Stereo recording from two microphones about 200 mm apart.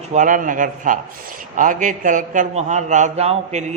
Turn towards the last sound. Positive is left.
turn(degrees=-35)  # may be behind; listen again after turning